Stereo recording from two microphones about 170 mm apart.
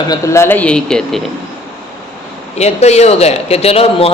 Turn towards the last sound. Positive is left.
turn(degrees=35)  # may be behind; listen again after turning